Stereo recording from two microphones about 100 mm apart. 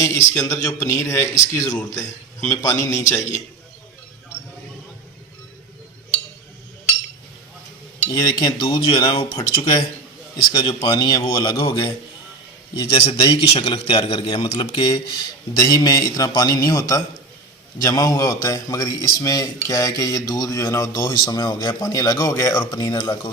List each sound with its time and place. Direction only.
0.0 s speech: 30° left (ahead or behind)
1.6 s a man's voice: 35° left (ahead or behind)
8.1 s speech: 40° left (ahead or behind)
11.3 s a man's voice: 30° left (ahead or behind)
11.5 s a man's voice: 55° left (ahead or behind)
12.9 s a man's voice: 85° left
13.1 s a man's voice: 50° left (ahead or behind); by 14.6 s 70° left (ahead or behind)
14.7 s speech: 50° left (ahead or behind)
15.5 s a man's voice: 40° left (ahead or behind)
22.7 s speech: 50° left (ahead or behind)